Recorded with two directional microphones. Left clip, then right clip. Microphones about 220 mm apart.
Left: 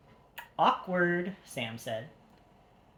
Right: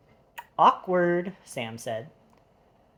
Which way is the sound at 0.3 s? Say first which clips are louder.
Right 6 dB; 45° right (ahead or behind).